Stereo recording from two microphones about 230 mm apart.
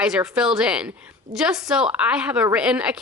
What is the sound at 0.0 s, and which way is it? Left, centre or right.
A woman's voice, centre.